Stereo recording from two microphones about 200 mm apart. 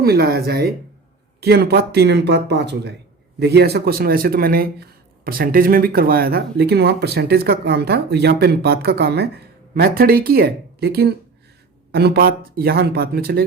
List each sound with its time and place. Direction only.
0.0 s speech: 50° right (ahead or behind)